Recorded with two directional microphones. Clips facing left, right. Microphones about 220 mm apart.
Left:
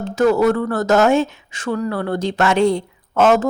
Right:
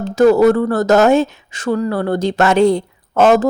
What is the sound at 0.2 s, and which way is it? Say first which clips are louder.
Speech: right 5 dB; 35° right (ahead or behind).